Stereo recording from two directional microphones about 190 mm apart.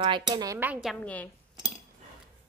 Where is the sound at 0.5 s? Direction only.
10° right (ahead or behind).